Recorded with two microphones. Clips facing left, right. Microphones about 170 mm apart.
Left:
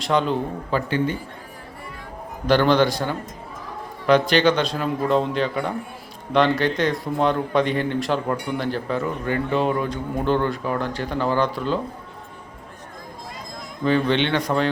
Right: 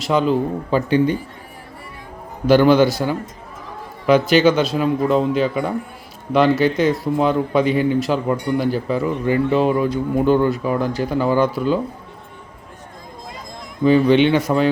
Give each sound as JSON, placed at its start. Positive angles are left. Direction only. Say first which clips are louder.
{"t": 0.0, "sound": "speech", "louder": "right 4 dB", "side_deg": -5}
{"t": 0.7, "sound": "a man's voice", "louder": "right 6 dB", "side_deg": -15}
{"t": 2.5, "sound": "a man's voice", "louder": "right 5 dB", "side_deg": -10}
{"t": 13.8, "sound": "a man's voice", "louder": "right 7 dB", "side_deg": -10}